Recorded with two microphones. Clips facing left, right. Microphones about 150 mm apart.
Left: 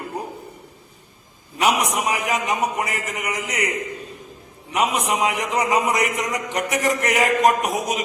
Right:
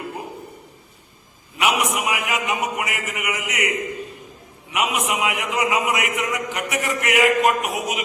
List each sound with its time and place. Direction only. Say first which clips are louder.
1.5 s a man's voice: left 1 dB; 40° left (ahead or behind)
4.7 s a man's voice: left 2 dB; 35° left (ahead or behind)